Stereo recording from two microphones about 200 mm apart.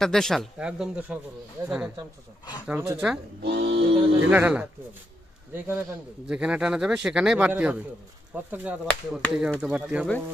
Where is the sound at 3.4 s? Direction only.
55° right (ahead or behind).